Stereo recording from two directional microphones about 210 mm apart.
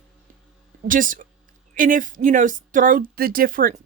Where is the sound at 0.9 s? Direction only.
40° right (ahead or behind).